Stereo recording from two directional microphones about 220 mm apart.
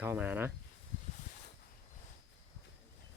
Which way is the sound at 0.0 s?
10° right (ahead or behind).